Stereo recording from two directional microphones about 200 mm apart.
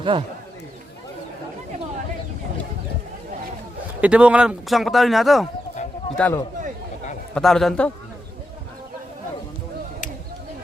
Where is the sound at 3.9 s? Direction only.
5° right (ahead or behind).